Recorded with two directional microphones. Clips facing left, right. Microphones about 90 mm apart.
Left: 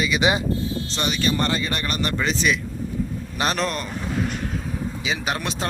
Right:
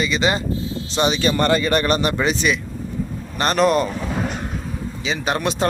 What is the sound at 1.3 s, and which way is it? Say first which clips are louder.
Speech: right 6 dB; 55° right (ahead or behind).